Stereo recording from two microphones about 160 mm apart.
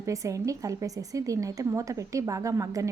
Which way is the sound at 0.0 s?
20° right (ahead or behind).